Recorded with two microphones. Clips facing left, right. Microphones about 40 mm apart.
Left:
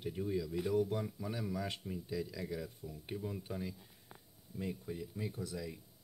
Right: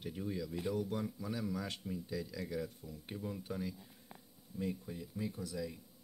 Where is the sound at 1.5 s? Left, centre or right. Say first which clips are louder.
Left 1 dB; left.